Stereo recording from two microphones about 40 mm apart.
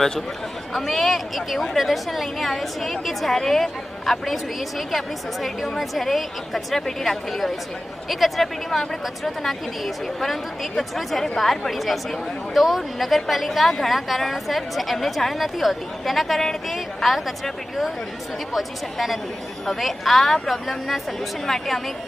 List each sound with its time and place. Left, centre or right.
0.7 s speech: centre